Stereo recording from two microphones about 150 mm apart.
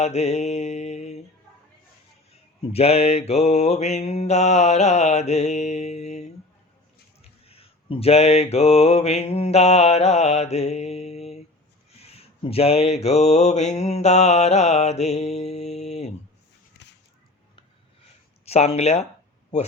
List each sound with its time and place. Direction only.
0.0 s mantra: 45° left (ahead or behind)
2.7 s mantra: 45° left (ahead or behind)
18.4 s mantra: 45° left (ahead or behind)